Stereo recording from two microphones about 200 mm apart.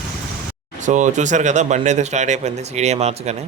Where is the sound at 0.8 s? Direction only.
40° right (ahead or behind).